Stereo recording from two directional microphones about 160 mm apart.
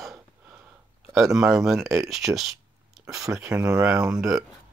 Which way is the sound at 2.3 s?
Centre (ahead or behind).